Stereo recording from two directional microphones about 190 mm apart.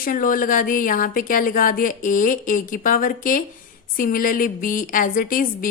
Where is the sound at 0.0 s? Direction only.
45° left (ahead or behind).